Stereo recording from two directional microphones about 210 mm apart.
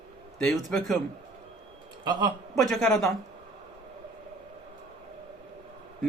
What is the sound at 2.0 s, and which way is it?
Speech, 20° right (ahead or behind).